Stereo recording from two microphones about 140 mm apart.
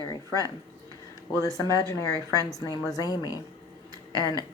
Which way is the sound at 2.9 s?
25° left (ahead or behind).